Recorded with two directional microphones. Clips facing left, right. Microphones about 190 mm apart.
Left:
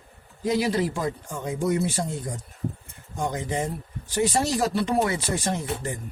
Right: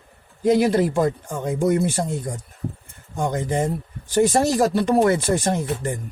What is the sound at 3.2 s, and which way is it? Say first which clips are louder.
A man's voice: right 5 dB; 50° right (ahead or behind).